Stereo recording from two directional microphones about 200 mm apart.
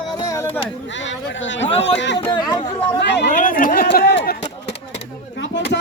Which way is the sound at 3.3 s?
40° left (ahead or behind).